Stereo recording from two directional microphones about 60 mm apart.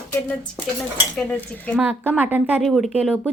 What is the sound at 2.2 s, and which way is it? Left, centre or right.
Speech, right.